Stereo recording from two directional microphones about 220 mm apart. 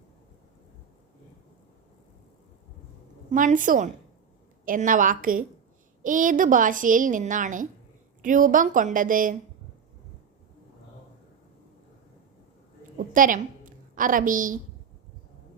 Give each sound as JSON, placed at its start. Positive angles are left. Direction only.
{"t": 3.3, "sound": "a woman's voice", "side_deg": -35}
{"t": 13.0, "sound": "a woman's voice", "side_deg": -40}